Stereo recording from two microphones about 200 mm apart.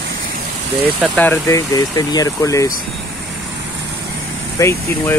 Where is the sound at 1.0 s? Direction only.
10° left (ahead or behind).